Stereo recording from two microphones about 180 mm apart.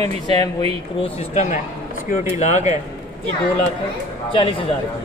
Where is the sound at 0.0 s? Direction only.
35° right (ahead or behind).